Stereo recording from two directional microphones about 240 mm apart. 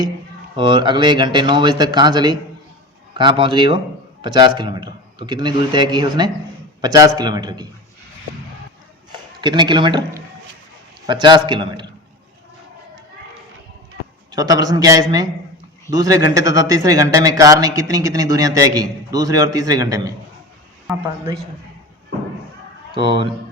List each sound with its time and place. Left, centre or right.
0.5 s a man's voice: centre
9.4 s a man's voice: centre
14.3 s a man's voice: centre
23.0 s a man's voice: right